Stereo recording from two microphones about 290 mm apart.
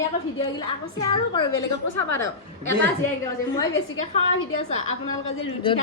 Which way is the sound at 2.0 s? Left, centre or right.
Left.